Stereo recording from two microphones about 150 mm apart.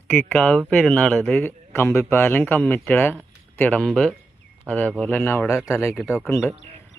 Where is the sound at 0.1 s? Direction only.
5° left (ahead or behind).